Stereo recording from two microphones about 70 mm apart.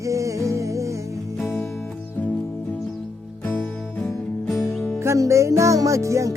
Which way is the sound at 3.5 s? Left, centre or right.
Left.